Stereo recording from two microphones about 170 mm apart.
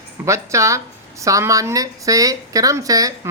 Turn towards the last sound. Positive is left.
turn(degrees=-20)  # may be behind; listen again after turning